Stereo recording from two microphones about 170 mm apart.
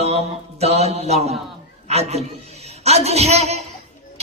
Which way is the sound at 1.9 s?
40° right (ahead or behind).